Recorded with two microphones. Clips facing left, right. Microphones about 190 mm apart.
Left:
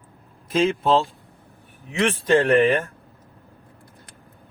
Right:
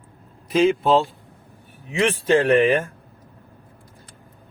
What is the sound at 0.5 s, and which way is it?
A man's voice, centre (ahead or behind).